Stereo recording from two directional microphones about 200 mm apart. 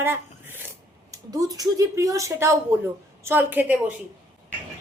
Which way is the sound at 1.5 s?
15° right (ahead or behind).